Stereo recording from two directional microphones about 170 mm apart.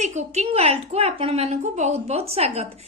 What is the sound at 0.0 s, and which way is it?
A woman's voice, 45° right (ahead or behind).